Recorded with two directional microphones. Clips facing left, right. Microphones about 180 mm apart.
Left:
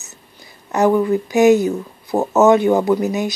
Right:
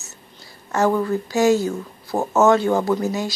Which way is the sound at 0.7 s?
15° left (ahead or behind).